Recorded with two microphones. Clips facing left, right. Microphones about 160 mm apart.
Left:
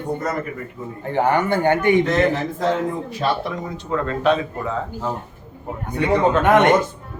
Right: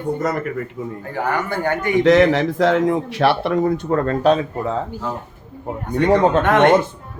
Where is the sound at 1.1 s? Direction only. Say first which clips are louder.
Left 5 dB; 25° left (ahead or behind).